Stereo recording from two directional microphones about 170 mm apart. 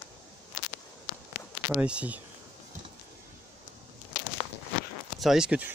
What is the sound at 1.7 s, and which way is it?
Speech, 5° right (ahead or behind).